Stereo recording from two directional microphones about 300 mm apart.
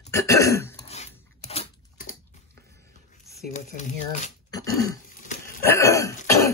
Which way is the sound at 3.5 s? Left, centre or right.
Left.